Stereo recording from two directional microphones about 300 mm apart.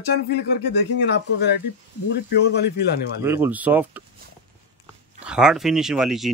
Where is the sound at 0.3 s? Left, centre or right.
Left.